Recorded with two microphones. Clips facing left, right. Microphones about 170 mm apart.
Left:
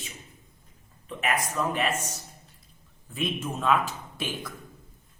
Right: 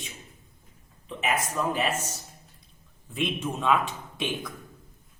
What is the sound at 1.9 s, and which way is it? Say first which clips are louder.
Speech: even; 30° right (ahead or behind).